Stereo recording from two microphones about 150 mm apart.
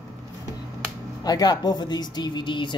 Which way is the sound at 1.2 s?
25° left (ahead or behind).